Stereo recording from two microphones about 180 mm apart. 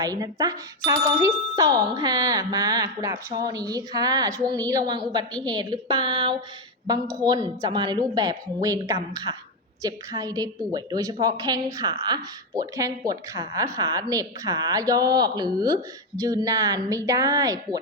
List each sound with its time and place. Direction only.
0.0 s a woman's voice: 20° right (ahead or behind)